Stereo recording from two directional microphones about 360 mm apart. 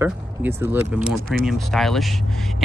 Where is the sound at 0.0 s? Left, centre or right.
Centre.